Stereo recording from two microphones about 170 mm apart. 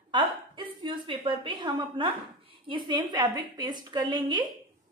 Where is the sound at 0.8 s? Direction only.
30° right (ahead or behind).